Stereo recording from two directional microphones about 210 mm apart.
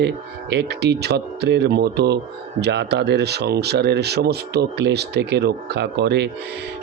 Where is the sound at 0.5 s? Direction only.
55° right (ahead or behind).